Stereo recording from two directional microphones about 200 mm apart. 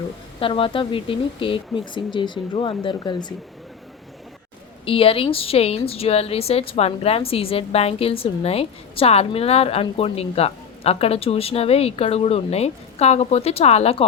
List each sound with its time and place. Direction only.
0.3 s a woman's voice: 25° left (ahead or behind)
4.9 s a woman's voice: 30° left (ahead or behind)